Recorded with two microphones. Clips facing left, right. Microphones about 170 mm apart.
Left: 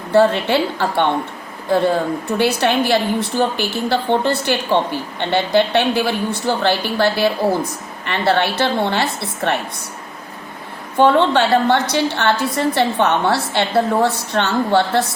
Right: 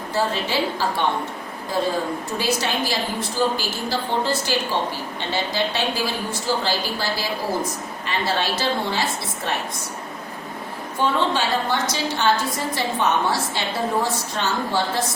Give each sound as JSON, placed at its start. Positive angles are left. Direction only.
{"t": 0.1, "sound": "a woman's voice", "side_deg": 65}
{"t": 10.9, "sound": "a woman's voice", "side_deg": 65}